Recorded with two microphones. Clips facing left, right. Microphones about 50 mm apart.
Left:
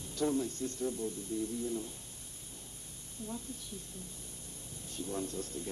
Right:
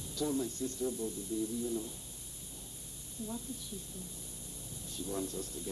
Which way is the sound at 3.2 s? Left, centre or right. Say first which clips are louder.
Right 1 dB; left.